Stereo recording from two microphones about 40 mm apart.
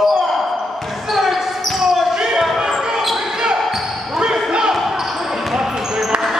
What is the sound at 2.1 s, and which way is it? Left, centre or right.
Basketball bounce, centre.